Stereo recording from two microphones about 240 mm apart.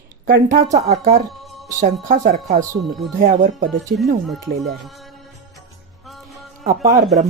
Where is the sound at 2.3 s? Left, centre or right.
Right.